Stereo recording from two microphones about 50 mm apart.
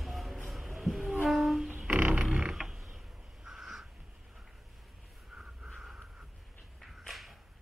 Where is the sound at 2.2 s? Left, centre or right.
Right.